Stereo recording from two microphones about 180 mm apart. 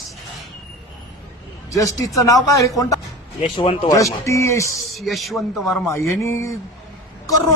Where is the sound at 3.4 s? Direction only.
35° left (ahead or behind).